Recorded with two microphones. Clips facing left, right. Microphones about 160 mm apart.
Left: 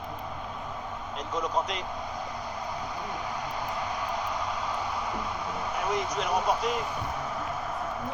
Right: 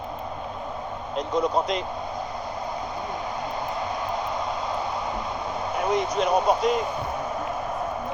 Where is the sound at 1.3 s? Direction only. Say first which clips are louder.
Right 6 dB; 30° right (ahead or behind).